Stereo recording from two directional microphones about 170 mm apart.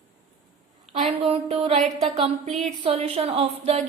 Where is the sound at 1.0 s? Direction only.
35° right (ahead or behind).